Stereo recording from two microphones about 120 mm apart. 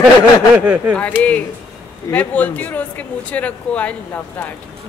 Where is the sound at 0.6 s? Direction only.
10° right (ahead or behind).